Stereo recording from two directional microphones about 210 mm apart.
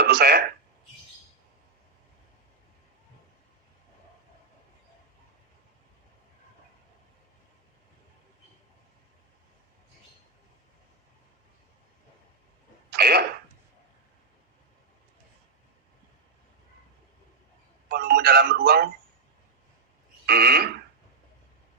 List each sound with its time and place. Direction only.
0.0 s speech: 50° right (ahead or behind)
12.9 s speech: 50° right (ahead or behind)
17.8 s speech: 50° right (ahead or behind)
20.2 s speech: 50° right (ahead or behind)